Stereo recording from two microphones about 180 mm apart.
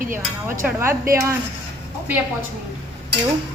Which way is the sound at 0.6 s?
5° right (ahead or behind).